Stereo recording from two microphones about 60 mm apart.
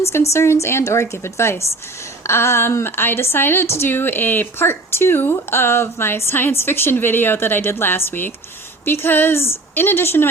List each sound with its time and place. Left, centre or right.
0.1 s a woman's voice: left